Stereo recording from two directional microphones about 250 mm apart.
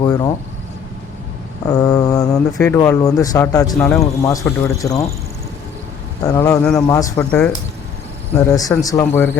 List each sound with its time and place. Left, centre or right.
0.0 s speech: centre
1.6 s speech: centre
6.2 s speech: centre